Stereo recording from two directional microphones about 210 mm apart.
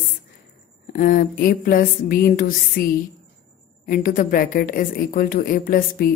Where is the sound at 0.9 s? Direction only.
40° left (ahead or behind).